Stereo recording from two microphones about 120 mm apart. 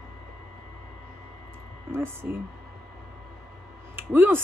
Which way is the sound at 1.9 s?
20° right (ahead or behind).